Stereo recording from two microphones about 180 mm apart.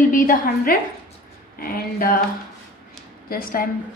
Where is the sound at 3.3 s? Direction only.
50° left (ahead or behind).